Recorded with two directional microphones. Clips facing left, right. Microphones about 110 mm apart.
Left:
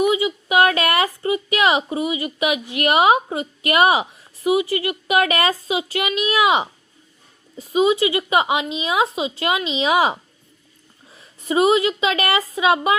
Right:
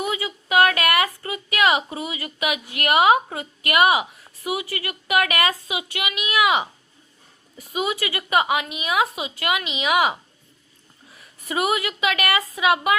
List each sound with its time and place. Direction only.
0.0 s a woman's voice: 20° left (ahead or behind)